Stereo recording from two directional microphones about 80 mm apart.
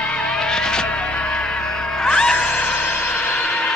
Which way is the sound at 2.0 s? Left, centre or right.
Centre.